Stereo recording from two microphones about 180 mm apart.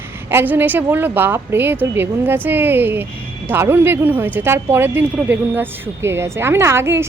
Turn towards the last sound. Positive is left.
turn(degrees=-15)  # may be behind; listen again after turning